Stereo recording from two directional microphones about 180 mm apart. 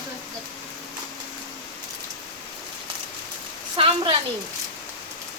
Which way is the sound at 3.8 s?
30° right (ahead or behind).